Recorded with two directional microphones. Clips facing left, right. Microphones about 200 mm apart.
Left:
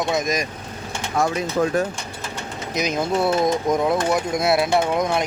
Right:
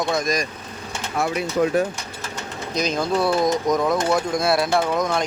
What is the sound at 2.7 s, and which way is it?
Speech, 20° left (ahead or behind).